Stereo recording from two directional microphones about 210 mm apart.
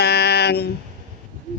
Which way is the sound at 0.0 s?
50° left (ahead or behind).